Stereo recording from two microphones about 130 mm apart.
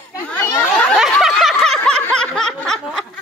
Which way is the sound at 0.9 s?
Centre (ahead or behind).